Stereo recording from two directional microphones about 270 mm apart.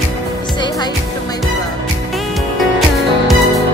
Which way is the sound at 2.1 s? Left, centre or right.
Centre.